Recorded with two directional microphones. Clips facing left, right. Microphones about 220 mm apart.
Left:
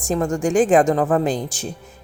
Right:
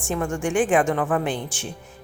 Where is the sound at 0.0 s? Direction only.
40° left (ahead or behind).